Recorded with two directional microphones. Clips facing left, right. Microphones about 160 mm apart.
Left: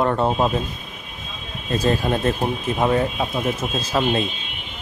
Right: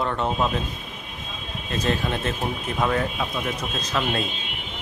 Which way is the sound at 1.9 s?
40° left (ahead or behind).